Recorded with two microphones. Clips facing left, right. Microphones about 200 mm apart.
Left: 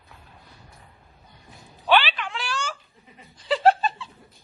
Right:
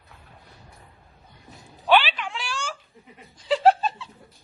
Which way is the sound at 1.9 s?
5° right (ahead or behind).